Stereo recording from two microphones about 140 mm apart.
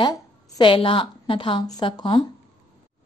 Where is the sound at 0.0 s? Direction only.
35° left (ahead or behind).